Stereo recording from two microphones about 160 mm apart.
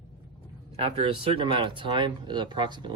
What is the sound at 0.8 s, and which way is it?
Speech, 35° right (ahead or behind).